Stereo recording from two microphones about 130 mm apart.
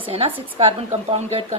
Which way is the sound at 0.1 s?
45° right (ahead or behind).